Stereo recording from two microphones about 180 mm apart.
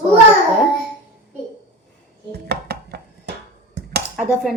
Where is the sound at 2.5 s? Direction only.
65° right (ahead or behind).